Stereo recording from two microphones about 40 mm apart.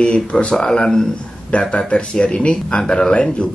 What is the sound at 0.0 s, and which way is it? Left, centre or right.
Speech, left.